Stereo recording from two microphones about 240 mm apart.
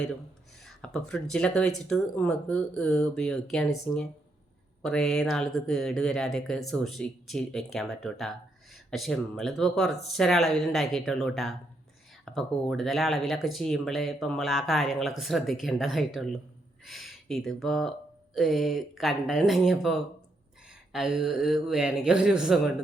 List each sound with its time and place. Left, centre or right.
0.6 s speech: centre